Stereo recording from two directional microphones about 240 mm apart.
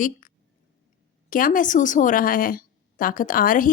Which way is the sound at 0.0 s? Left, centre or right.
Left.